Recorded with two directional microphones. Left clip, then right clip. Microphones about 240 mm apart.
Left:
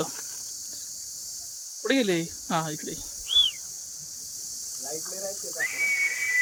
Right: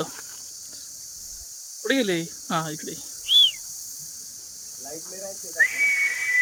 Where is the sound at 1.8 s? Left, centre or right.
Centre.